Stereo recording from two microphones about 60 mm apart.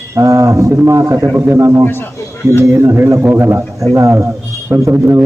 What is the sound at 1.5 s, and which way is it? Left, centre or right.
Speech, right.